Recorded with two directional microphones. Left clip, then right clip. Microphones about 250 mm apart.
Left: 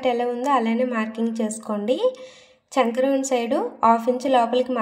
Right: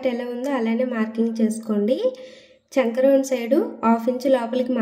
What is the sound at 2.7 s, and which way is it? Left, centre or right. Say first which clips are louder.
Speech: even; left.